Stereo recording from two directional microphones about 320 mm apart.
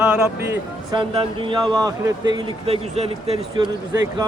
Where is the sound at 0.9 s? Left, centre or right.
Centre.